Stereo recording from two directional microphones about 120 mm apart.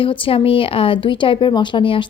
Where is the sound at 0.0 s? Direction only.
50° left (ahead or behind).